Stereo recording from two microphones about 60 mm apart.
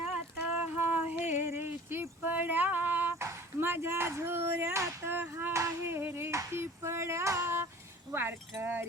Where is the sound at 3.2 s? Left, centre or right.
Right.